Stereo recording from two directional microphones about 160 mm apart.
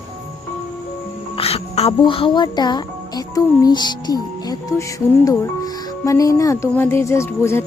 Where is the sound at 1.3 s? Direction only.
40° left (ahead or behind).